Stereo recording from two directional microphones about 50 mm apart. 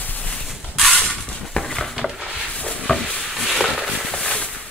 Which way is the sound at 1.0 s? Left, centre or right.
Centre.